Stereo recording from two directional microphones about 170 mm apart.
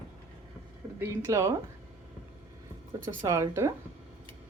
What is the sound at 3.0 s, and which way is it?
Speech, 20° right (ahead or behind).